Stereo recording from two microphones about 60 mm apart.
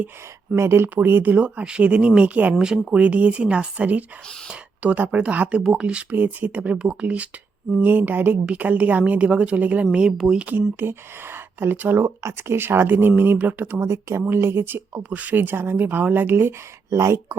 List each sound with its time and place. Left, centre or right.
0.5 s a woman's voice: right
2.6 s a woman's voice: centre
10.8 s speech: right
12.0 s speech: right
13.8 s speech: right
16.9 s speech: right